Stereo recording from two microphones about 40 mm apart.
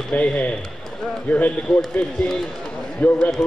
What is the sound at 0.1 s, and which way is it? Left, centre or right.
Speech, left.